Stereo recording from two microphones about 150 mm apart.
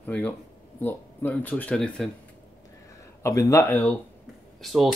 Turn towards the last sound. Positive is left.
turn(degrees=0)  # may be behind; listen again after turning